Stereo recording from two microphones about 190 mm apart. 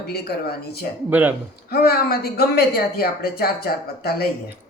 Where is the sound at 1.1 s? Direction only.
10° right (ahead or behind).